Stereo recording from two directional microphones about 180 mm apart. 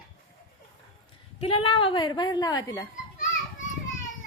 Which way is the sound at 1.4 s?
30° left (ahead or behind).